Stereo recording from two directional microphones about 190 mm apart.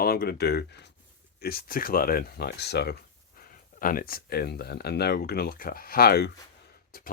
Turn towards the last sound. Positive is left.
turn(degrees=55)  # may be behind; listen again after turning